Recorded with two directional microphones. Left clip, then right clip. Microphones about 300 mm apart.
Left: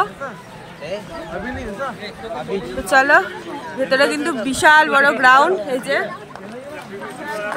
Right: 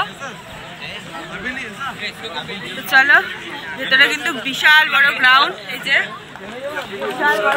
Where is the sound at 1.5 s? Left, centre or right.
Centre.